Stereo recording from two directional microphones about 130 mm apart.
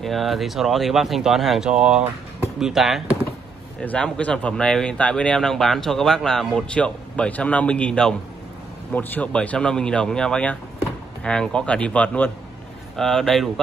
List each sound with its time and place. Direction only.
0.0 s speech: centre (ahead or behind)
3.8 s speech: 10° left (ahead or behind)